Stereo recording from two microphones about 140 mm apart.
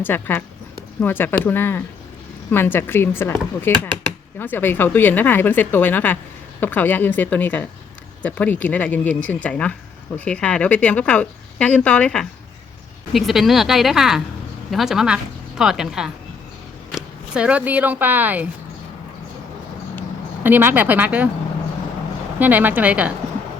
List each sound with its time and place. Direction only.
0.0 s speech: 15° left (ahead or behind); by 18.4 s 10° right (ahead or behind)
20.4 s speech: 15° right (ahead or behind)
22.4 s speech: 10° right (ahead or behind)